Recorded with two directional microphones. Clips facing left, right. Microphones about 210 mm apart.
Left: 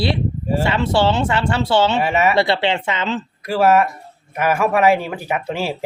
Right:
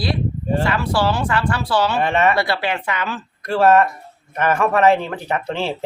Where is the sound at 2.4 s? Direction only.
25° left (ahead or behind).